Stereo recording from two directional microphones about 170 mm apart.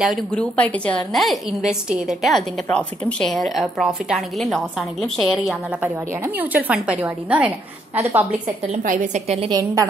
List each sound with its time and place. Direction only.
0.0 s a woman's voice: centre (ahead or behind)
8.7 s a woman's voice: 50° right (ahead or behind)
9.5 s a woman's voice: 15° right (ahead or behind)